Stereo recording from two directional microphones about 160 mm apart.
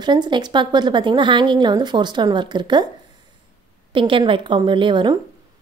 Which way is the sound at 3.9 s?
30° right (ahead or behind).